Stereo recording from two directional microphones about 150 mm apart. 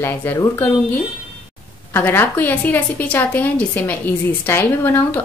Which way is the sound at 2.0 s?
15° left (ahead or behind).